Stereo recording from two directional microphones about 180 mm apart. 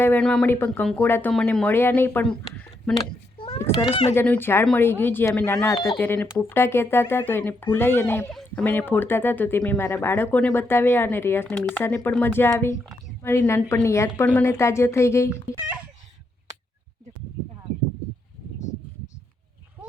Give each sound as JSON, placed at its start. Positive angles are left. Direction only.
{"t": 0.0, "sound": "speech", "side_deg": 10}
{"t": 2.9, "sound": "a sound", "side_deg": 30}
{"t": 3.8, "sound": "speech", "side_deg": 30}
{"t": 4.1, "sound": "speech", "side_deg": 10}